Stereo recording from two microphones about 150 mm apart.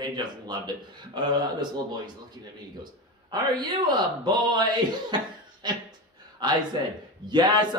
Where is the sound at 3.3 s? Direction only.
30° right (ahead or behind).